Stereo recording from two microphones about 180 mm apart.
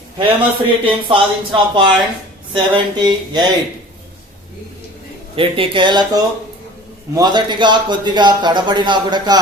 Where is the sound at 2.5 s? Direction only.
25° right (ahead or behind).